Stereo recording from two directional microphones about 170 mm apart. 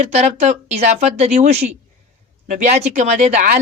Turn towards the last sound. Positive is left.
turn(degrees=-45)  # may be behind; listen again after turning